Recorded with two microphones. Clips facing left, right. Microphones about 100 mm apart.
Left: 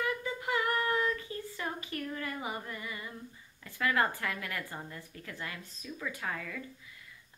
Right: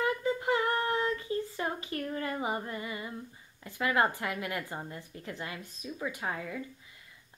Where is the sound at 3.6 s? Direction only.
20° right (ahead or behind).